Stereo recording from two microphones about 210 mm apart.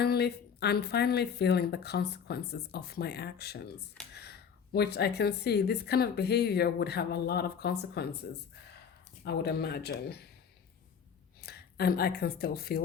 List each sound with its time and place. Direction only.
0.0 s a woman's voice: 50° left (ahead or behind)
9.2 s a woman's voice: 50° left (ahead or behind)
11.3 s speech: 50° left (ahead or behind)